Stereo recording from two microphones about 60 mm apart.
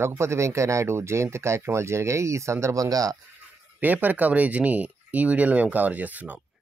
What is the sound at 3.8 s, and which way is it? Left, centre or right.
Speech, right.